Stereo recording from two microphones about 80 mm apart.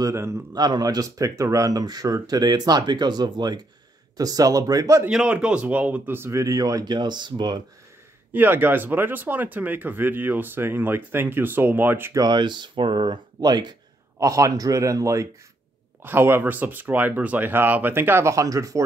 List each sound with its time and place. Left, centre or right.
0.1 s a man's voice: right
0.6 s speech: right
4.2 s speech: right
5.1 s speech: centre; by 6.4 s right
6.4 s speech: right
6.9 s speech: right
8.3 s speech: right
12.3 s speech: right
14.2 s speech: right
16.0 s speech: right
18.3 s speech: right